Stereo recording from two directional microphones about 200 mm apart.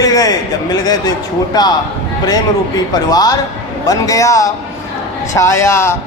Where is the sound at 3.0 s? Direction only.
20° left (ahead or behind).